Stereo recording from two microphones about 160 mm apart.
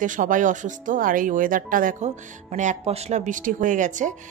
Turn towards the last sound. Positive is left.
turn(degrees=-50)  # may be behind; listen again after turning